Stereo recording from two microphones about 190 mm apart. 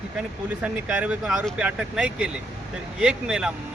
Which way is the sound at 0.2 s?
5° right (ahead or behind).